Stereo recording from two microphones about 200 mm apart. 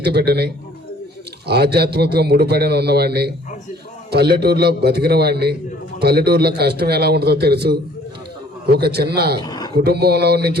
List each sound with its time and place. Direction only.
0.0 s a man's voice: 55° right (ahead or behind)
9.4 s a sound: 20° left (ahead or behind)
9.7 s a man's voice: 50° right (ahead or behind)